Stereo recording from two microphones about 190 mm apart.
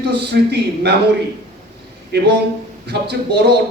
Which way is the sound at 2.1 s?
60° right (ahead or behind).